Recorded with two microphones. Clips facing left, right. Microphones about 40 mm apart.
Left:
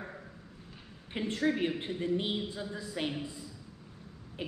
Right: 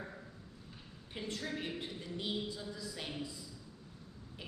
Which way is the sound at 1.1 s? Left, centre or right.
Left.